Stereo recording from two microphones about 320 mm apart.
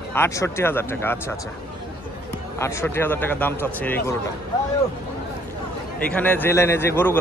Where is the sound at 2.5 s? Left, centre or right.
Centre.